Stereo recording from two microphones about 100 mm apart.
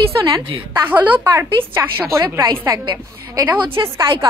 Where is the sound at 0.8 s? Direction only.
20° right (ahead or behind).